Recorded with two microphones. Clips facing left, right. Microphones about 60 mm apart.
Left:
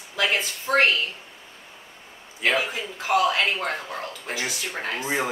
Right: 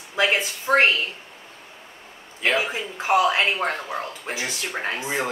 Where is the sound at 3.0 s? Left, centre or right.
Right.